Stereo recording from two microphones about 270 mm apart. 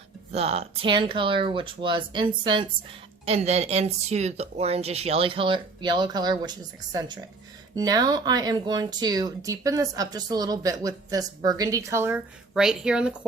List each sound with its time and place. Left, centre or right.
0.3 s speech: right; by 13.1 s centre